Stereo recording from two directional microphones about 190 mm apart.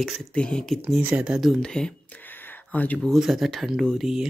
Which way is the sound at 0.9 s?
5° right (ahead or behind).